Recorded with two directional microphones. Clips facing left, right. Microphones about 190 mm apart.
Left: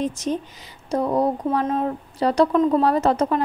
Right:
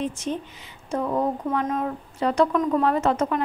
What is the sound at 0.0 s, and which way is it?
Speech, 40° left (ahead or behind).